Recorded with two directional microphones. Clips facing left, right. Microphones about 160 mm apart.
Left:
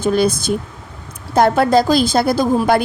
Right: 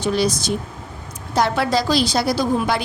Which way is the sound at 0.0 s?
50° left (ahead or behind).